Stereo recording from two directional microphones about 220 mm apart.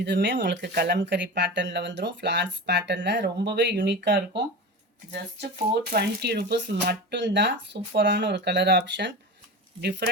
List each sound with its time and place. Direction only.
0.0 s speech: 50° right (ahead or behind)